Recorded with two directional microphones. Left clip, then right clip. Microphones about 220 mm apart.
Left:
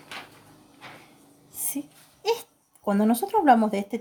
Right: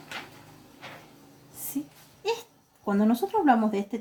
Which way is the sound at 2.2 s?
50° left (ahead or behind).